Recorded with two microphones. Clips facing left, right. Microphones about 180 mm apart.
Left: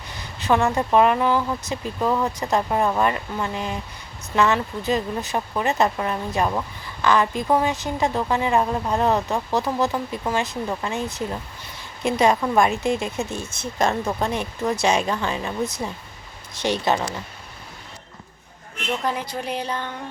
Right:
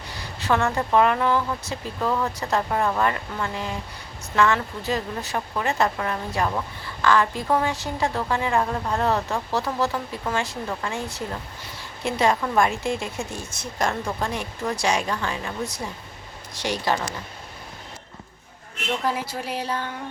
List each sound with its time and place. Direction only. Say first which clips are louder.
0.2 s a woman's voice: left 3 dB; 20° left (ahead or behind)
19.0 s speech: even; 5° right (ahead or behind)